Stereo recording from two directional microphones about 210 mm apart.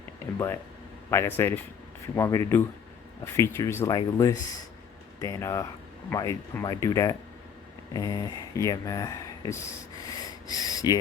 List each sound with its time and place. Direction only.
0.3 s speech: 10° left (ahead or behind)